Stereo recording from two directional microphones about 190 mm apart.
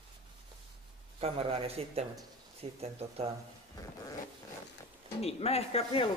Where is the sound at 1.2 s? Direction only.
30° right (ahead or behind).